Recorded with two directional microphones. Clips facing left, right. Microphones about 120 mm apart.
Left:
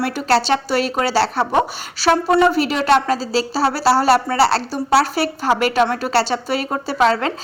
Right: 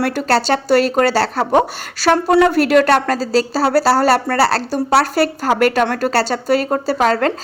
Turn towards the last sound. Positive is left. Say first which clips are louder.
# right 2 dB
turn(degrees=-45)  # may be behind; listen again after turning